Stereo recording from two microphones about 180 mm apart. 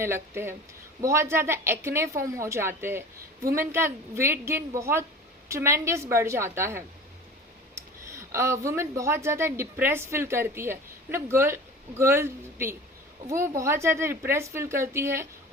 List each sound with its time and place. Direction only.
0.0 s a woman's voice: 15° right (ahead or behind)
8.3 s a woman's voice: 15° right (ahead or behind)